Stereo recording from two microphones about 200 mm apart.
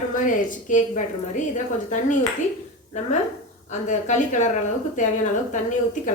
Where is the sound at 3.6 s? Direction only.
35° left (ahead or behind).